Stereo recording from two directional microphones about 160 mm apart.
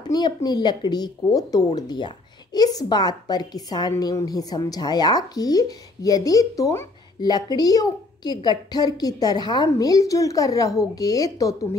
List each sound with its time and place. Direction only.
0.0 s speech: 25° left (ahead or behind)